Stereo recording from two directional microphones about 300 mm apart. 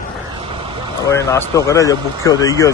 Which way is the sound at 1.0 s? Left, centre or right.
Centre.